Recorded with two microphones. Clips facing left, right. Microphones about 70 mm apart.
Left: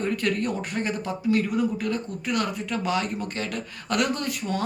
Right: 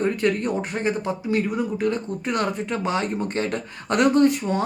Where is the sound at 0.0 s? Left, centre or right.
Right.